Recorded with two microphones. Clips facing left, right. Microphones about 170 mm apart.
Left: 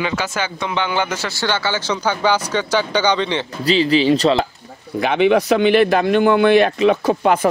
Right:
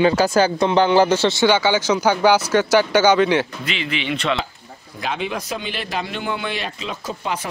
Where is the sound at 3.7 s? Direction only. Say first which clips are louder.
Left 11 dB; 35° left (ahead or behind).